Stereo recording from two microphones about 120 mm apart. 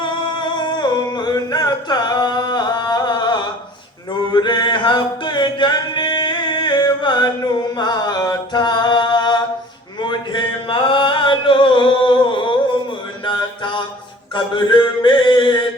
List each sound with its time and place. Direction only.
0.0 s music: 40° left (ahead or behind)
10.0 s a sound: 40° left (ahead or behind)
13.2 s mantra: 40° left (ahead or behind)